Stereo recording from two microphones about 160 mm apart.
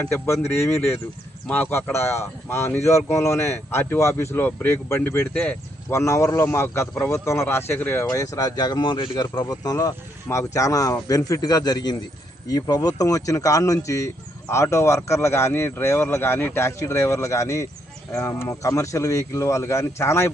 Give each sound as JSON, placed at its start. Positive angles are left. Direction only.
{"t": 0.0, "sound": "a man's voice", "side_deg": 15}